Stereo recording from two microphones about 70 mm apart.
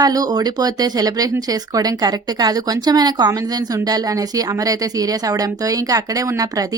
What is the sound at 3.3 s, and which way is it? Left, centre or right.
A woman's voice, right.